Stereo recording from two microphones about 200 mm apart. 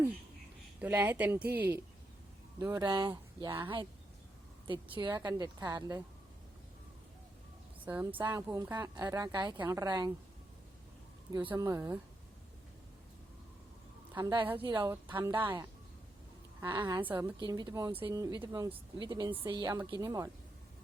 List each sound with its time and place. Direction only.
0.8 s speech: 10° right (ahead or behind)
7.9 s speech: 10° right (ahead or behind)
8.2 s speech: 20° right (ahead or behind)
8.4 s speech: 10° right (ahead or behind)
11.4 s speech: 15° right (ahead or behind)
14.2 s speech: 25° right (ahead or behind)
16.6 s speech: 10° right (ahead or behind)
17.4 s speech: 20° right (ahead or behind)